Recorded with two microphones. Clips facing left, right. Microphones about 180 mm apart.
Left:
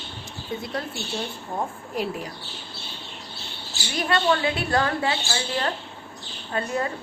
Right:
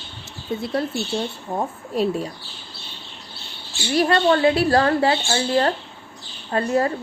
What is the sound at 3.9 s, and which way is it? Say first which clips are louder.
A woman's voice: right 5 dB; 40° right (ahead or behind).